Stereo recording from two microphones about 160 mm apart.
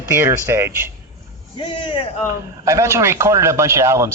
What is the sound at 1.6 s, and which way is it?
Speech, 30° left (ahead or behind).